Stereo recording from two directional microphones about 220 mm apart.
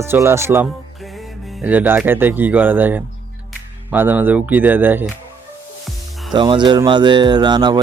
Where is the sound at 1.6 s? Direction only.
10° right (ahead or behind).